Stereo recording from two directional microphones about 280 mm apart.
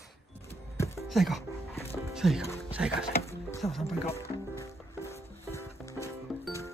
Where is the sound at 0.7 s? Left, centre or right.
Centre.